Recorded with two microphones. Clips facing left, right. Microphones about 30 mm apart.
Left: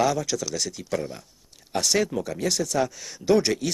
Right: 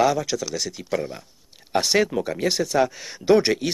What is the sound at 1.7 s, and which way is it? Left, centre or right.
Speech, right.